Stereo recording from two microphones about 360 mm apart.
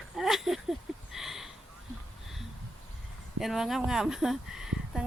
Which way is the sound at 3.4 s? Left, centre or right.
Centre.